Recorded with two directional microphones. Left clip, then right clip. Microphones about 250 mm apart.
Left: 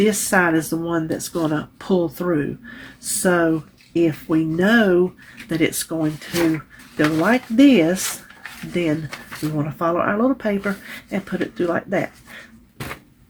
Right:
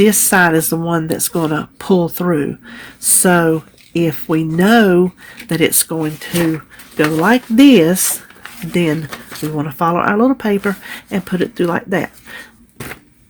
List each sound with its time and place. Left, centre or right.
0.0 s speech: right